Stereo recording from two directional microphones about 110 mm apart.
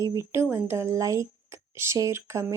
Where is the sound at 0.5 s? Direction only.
25° right (ahead or behind).